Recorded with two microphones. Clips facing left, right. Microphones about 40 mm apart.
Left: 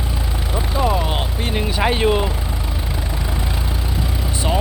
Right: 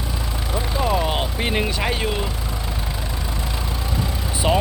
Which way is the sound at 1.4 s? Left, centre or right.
Centre.